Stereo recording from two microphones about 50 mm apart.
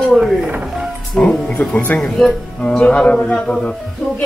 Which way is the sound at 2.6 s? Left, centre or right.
Centre.